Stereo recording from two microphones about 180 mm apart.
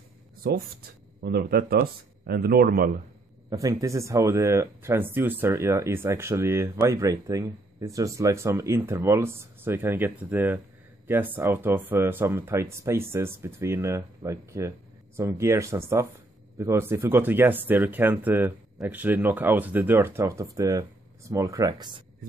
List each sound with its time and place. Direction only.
1.2 s a man's voice: 60° right (ahead or behind)
3.4 s speech: 20° right (ahead or behind)